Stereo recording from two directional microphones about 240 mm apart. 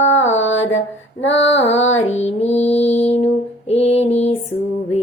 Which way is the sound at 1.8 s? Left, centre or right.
Left.